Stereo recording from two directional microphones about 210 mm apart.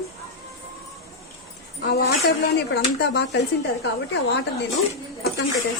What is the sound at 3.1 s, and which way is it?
Speech, 55° left (ahead or behind).